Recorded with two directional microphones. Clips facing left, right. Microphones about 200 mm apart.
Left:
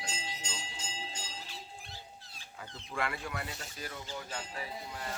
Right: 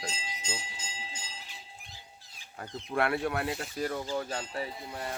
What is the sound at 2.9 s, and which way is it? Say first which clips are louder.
Speech: right 8 dB; 65° right (ahead or behind).